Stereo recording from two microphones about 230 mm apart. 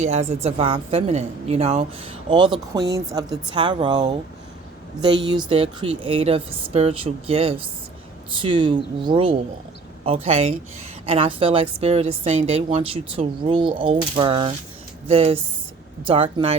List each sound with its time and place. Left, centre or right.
0.0 s a woman's voice: right